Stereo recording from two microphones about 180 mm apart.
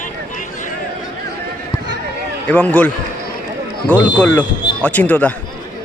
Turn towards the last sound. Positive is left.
turn(degrees=10)  # may be behind; listen again after turning